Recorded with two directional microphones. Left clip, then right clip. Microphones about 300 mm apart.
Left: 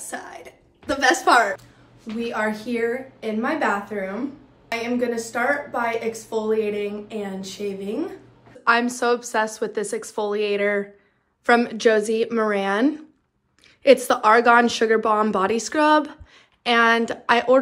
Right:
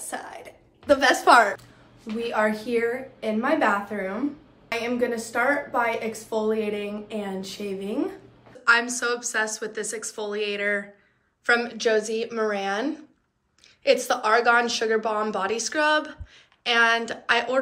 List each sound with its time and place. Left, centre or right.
0.1 s a sound: centre
2.1 s a woman's voice: centre
8.6 s a woman's voice: centre